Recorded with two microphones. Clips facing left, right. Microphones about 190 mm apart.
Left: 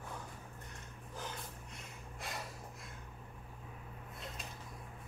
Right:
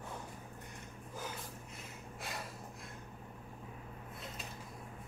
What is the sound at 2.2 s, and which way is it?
Snort, centre (ahead or behind).